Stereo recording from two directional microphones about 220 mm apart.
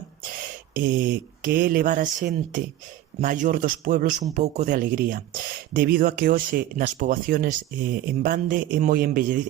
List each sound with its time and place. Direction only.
0.7 s a man's voice: 40° right (ahead or behind)